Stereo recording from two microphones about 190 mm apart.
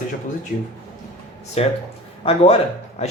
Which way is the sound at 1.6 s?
35° left (ahead or behind).